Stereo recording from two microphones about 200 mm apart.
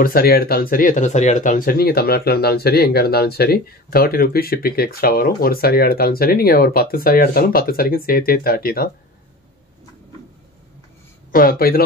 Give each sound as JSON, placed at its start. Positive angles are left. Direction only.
{"t": 0.0, "sound": "speech", "side_deg": 50}
{"t": 11.3, "sound": "speech", "side_deg": 45}